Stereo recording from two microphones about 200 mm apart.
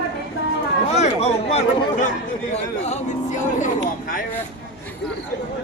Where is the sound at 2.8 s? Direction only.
35° left (ahead or behind).